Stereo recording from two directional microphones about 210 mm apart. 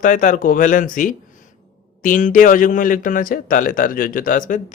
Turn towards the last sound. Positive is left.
turn(degrees=40)  # may be behind; listen again after turning